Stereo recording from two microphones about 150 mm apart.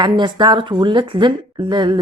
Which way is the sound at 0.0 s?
30° right (ahead or behind).